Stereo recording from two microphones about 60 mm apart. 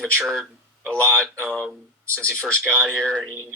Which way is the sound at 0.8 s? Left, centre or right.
Left.